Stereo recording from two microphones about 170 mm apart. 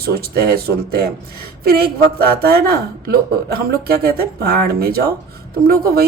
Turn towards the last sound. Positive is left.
turn(degrees=-60)  # may be behind; listen again after turning